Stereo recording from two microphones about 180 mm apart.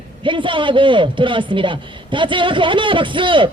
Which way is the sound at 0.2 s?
30° right (ahead or behind).